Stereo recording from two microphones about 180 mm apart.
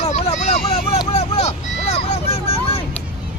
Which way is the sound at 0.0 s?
35° left (ahead or behind).